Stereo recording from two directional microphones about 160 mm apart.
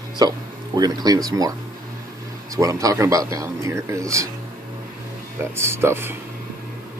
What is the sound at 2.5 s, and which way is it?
Speech, 20° right (ahead or behind).